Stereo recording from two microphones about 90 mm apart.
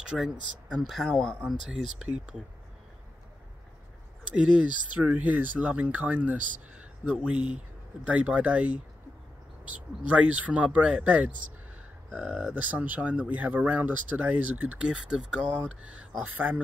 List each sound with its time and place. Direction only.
0.0 s speech: 10° right (ahead or behind)
2.0 s speech: 15° right (ahead or behind)
4.4 s speech: 10° right (ahead or behind)
10.0 s speech: 15° right (ahead or behind)